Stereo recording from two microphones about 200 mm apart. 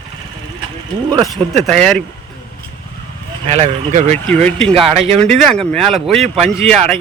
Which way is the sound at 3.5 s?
30° right (ahead or behind).